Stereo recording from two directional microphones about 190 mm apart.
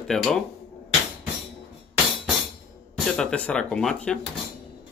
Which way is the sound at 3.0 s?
5° left (ahead or behind).